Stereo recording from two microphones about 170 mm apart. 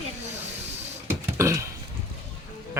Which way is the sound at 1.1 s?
15° right (ahead or behind).